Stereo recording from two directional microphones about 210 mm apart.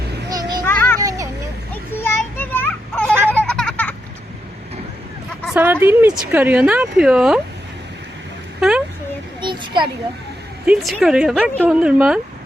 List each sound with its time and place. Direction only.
0.3 s children playing: 15° right (ahead or behind)
0.6 s children playing: 10° left (ahead or behind)
0.9 s children playing: 15° right (ahead or behind)
2.0 s children playing: 10° left (ahead or behind)
3.2 s a sound: 5° left (ahead or behind)
5.5 s a woman's voice: 10° right (ahead or behind)
9.4 s a sound: 20° right (ahead or behind)
10.7 s a woman's voice: centre (ahead or behind)